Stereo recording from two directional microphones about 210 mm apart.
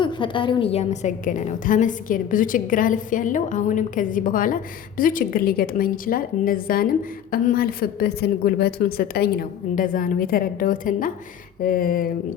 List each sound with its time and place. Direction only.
0.0 s a woman's voice: 25° left (ahead or behind); by 12.1 s 45° left (ahead or behind)